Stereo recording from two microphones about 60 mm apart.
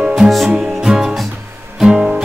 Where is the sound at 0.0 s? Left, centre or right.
Centre.